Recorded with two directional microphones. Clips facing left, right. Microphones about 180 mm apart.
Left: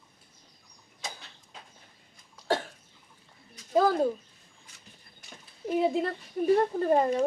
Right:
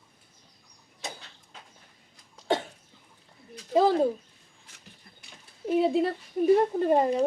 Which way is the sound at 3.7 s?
20° right (ahead or behind).